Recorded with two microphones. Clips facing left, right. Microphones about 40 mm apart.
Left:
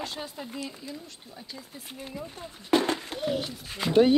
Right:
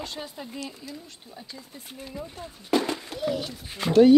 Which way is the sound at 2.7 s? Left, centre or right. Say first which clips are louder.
Left 1 dB; left.